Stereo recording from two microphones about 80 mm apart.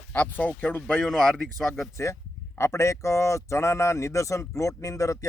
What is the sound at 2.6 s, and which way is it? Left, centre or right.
Speech, left.